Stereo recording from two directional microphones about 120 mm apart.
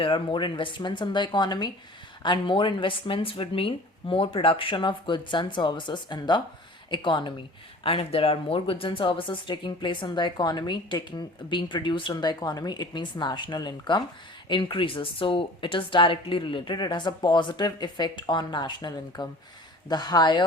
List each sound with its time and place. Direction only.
0.0 s speech: 45° left (ahead or behind)
7.9 s speech: 50° left (ahead or behind)